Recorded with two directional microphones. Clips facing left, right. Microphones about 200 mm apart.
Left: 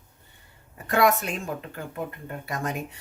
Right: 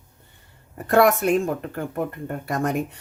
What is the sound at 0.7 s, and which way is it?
Speech, 50° right (ahead or behind).